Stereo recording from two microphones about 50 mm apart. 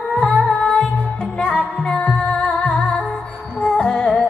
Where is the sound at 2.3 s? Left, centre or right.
Left.